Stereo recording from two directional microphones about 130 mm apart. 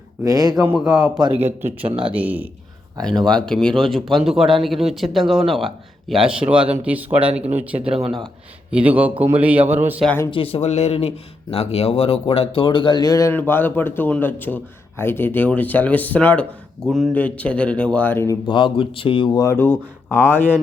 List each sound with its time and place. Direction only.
0.2 s speech: 25° right (ahead or behind)
3.0 s speech: 5° left (ahead or behind); by 7.8 s 10° right (ahead or behind)
7.8 s speech: 50° right (ahead or behind)
8.7 s speech: 10° right (ahead or behind)
10.3 s speech: 45° left (ahead or behind); by 13.3 s 30° left (ahead or behind)
13.3 s a man's voice: 15° left (ahead or behind)
16.9 s speech: centre (ahead or behind)
17.2 s a man's voice: 10° left (ahead or behind)
18.4 s speech: 40° left (ahead or behind)
19.4 s a man's voice: 20° left (ahead or behind)